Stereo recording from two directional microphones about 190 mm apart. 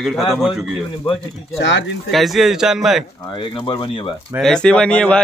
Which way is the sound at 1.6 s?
70° left (ahead or behind).